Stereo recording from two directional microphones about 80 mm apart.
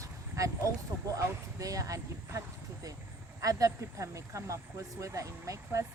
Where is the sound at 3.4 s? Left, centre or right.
Right.